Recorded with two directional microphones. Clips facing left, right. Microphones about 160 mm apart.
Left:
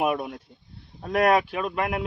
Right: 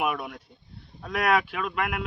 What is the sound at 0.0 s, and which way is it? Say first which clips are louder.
Speech: left 4 dB; 30° left (ahead or behind).